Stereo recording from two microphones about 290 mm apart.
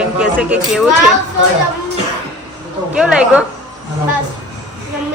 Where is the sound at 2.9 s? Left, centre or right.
Centre.